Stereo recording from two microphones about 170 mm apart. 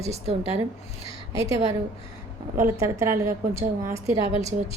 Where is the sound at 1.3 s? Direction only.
20° right (ahead or behind).